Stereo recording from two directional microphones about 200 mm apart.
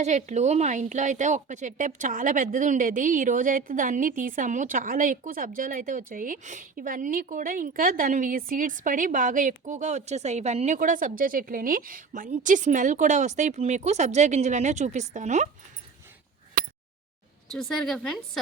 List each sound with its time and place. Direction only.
0.0 s a woman's voice: 35° right (ahead or behind)
17.5 s speech: centre (ahead or behind)